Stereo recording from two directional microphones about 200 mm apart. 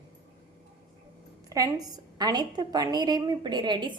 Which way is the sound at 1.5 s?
15° right (ahead or behind).